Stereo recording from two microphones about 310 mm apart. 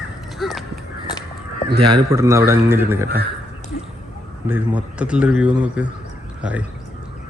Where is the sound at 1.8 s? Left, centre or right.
Centre.